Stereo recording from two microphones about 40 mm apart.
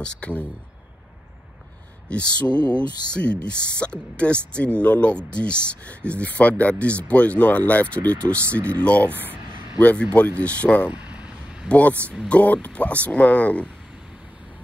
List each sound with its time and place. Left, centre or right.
0.0 s speech: left
2.0 s speech: left
9.3 s a sound: left
10.4 s speech: left
10.9 s vehicle: right
11.7 s speech: left